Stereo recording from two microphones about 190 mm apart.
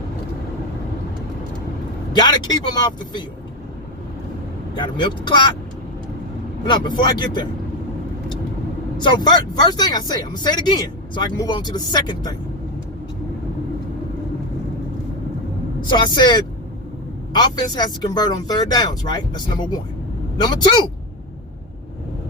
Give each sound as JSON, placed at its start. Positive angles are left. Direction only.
{"t": 2.1, "sound": "speech", "side_deg": 20}
{"t": 4.7, "sound": "speech", "side_deg": 25}
{"t": 6.7, "sound": "speech", "side_deg": 25}
{"t": 9.0, "sound": "speech", "side_deg": 20}
{"t": 15.9, "sound": "speech", "side_deg": 25}